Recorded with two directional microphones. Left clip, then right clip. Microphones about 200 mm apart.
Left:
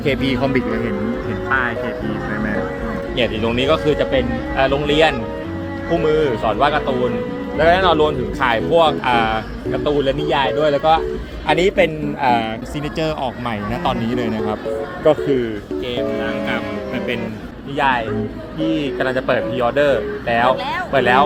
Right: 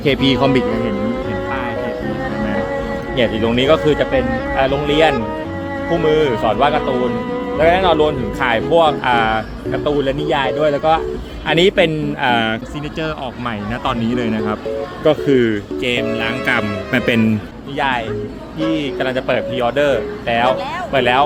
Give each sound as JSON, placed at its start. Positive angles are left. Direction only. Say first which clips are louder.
{"t": 0.0, "sound": "speech", "louder": "right 4 dB", "side_deg": -35}
{"t": 1.5, "sound": "music", "louder": "left 8 dB", "side_deg": -5}
{"t": 3.2, "sound": "speech", "louder": "right 3 dB", "side_deg": -20}
{"t": 13.8, "sound": "speech", "louder": "right 2 dB", "side_deg": -10}
{"t": 15.0, "sound": "speech", "louder": "right 2 dB", "side_deg": -35}
{"t": 16.5, "sound": "speech", "louder": "right 5 dB", "side_deg": -60}
{"t": 17.7, "sound": "speech", "louder": "left 1 dB", "side_deg": -10}